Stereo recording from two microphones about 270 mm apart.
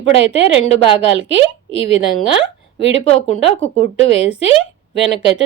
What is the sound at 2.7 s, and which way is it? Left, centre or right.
A woman's voice, right.